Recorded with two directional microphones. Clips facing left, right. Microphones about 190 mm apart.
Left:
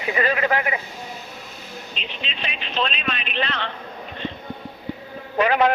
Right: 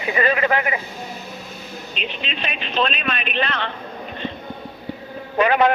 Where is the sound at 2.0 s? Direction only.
55° right (ahead or behind).